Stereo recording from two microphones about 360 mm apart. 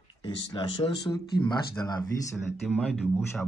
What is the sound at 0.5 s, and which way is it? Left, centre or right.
Speech, centre.